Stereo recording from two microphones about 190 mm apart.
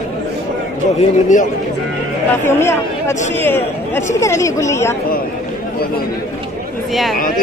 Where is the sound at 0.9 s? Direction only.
40° left (ahead or behind).